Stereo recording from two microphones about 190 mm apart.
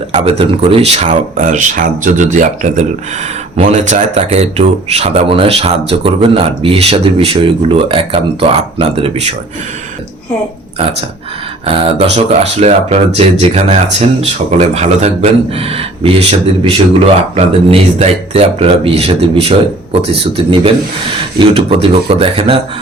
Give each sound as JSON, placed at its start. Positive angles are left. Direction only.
{"t": 0.1, "sound": "speech", "side_deg": -30}
{"t": 11.6, "sound": "speech", "side_deg": -30}